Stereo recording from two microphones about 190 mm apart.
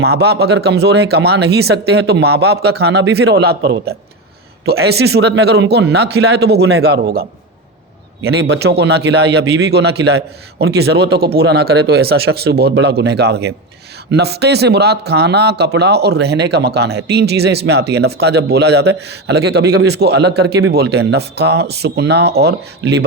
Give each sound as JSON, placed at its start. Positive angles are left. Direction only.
{"t": 0.0, "sound": "speech", "side_deg": -60}
{"t": 8.4, "sound": "speech", "side_deg": -60}